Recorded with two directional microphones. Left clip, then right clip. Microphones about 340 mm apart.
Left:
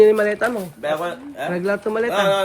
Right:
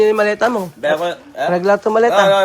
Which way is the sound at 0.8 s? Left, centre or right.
Right.